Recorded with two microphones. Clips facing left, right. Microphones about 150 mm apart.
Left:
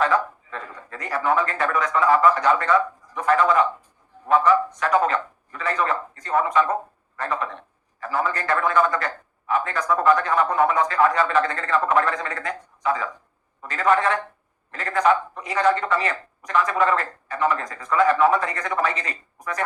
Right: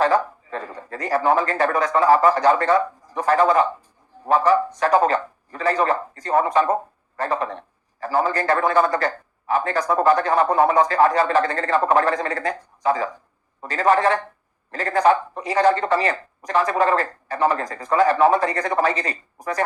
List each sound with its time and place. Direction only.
0.0 s a man's voice: 35° right (ahead or behind)